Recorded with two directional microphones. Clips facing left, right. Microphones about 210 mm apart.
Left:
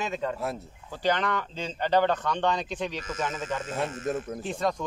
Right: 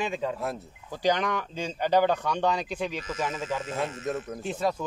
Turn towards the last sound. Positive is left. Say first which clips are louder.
# even
turn(degrees=-5)  # may be behind; listen again after turning